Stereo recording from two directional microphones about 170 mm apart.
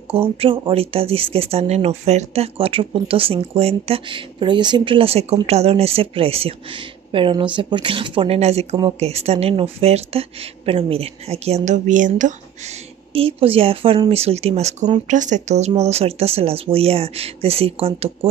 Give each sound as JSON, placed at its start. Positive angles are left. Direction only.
{"t": 0.1, "sound": "speech", "side_deg": -35}